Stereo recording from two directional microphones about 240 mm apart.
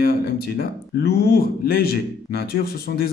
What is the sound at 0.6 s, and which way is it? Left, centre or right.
Speech, left.